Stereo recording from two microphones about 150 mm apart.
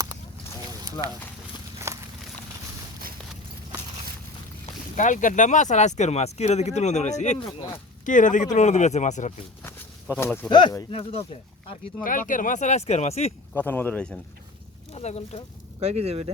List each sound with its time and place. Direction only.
1.9 s walk: 20° right (ahead or behind)
4.9 s speech: 60° left (ahead or behind)
9.6 s a sound: 15° left (ahead or behind)
10.5 s speech: 30° left (ahead or behind)
10.9 s speech: 40° left (ahead or behind)
12.0 s speech: 65° left (ahead or behind); by 13.3 s 45° left (ahead or behind)
13.5 s speech: 10° left (ahead or behind)
14.9 s speech: 45° left (ahead or behind)
15.8 s speech: 45° right (ahead or behind)